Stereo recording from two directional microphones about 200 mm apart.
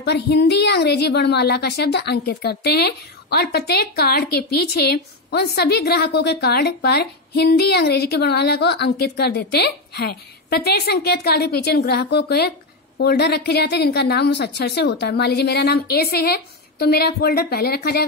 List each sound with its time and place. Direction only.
0.0 s a woman's voice: 55° left (ahead or behind)